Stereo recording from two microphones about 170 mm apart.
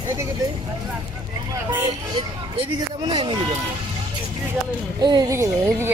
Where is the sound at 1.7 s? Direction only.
30° right (ahead or behind).